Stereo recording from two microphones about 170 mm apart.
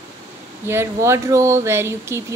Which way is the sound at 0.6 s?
15° right (ahead or behind).